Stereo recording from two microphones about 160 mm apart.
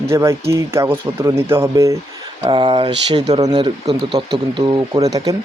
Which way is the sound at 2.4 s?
30° right (ahead or behind).